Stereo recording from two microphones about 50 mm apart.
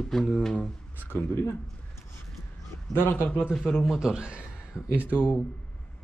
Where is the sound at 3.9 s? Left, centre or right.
Centre.